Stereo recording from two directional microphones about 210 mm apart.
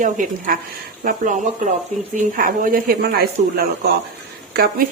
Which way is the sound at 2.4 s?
40° right (ahead or behind).